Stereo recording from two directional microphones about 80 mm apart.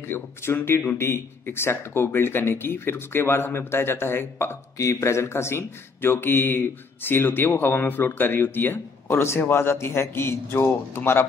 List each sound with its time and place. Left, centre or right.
0.1 s speech: left
4.7 s speech: left